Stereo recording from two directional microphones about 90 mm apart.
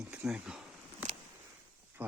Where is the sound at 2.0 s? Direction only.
20° right (ahead or behind).